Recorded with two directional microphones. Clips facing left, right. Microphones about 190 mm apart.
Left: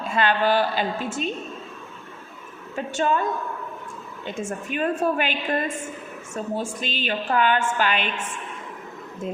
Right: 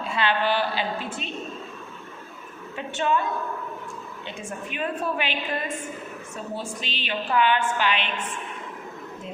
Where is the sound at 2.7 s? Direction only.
40° left (ahead or behind).